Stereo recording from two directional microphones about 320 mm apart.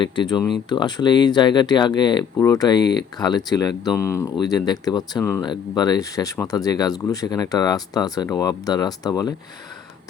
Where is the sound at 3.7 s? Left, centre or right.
Centre.